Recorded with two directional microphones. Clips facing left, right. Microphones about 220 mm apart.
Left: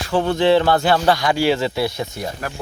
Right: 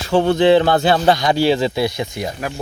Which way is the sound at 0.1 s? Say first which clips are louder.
Right 3 dB; 25° right (ahead or behind).